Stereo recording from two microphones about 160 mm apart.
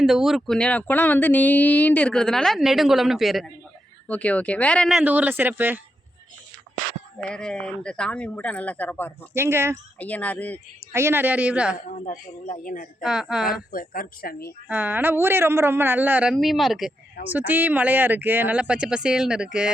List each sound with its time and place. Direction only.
0.0 s speech: centre (ahead or behind)
5.0 s speech: 10° right (ahead or behind)
7.2 s speech: 5° left (ahead or behind)
9.3 s speech: 15° right (ahead or behind)
10.0 s speech: 10° left (ahead or behind)
10.9 s speech: 15° right (ahead or behind)
11.9 s speech: 55° left (ahead or behind)
13.0 s speech: 5° right (ahead or behind)
13.5 s speech: 60° left (ahead or behind)
14.7 s speech: 10° right (ahead or behind)
17.3 s speech: 10° right (ahead or behind)